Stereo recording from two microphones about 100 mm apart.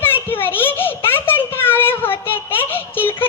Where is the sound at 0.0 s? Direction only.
20° left (ahead or behind).